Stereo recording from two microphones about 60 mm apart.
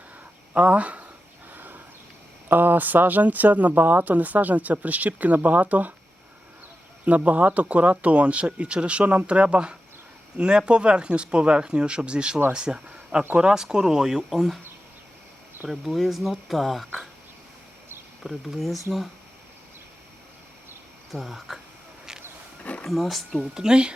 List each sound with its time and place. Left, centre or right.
0.5 s speech: right
1.5 s a sound: right
2.5 s speech: right
7.0 s speech: right; by 14.6 s centre
15.8 s speech: centre
18.2 s speech: centre
21.1 s speech: centre
22.6 s a sound: left
22.9 s speech: centre
23.6 s speech: centre